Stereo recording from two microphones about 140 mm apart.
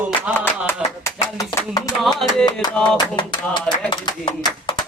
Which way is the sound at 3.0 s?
35° left (ahead or behind).